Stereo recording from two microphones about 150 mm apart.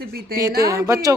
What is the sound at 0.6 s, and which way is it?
Speech, 20° right (ahead or behind).